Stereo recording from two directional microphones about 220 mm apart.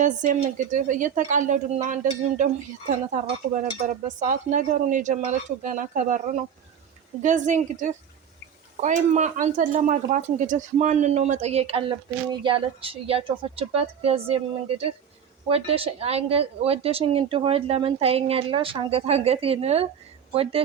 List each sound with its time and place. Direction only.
0.0 s speech: 35° right (ahead or behind)
3.6 s speech: 35° right (ahead or behind)